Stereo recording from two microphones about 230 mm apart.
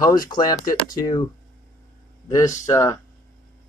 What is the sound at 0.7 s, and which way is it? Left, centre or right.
Speech, left.